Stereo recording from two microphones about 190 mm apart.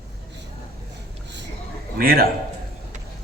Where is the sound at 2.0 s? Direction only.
50° right (ahead or behind).